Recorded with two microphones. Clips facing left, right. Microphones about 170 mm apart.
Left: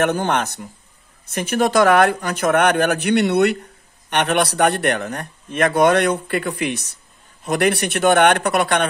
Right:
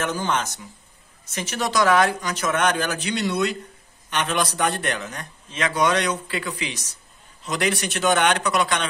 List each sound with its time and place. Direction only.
0.0 s a man's voice: 65° left (ahead or behind)